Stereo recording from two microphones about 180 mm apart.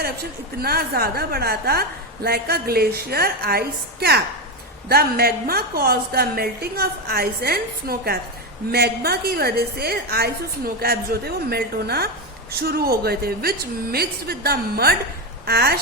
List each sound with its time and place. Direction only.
0.6 s a woman's voice: 60° right (ahead or behind)